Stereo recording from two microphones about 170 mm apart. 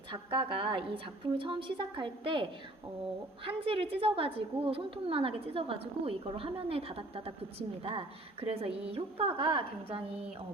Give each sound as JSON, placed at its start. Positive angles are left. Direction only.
{"t": 0.1, "sound": "a woman's voice", "side_deg": -30}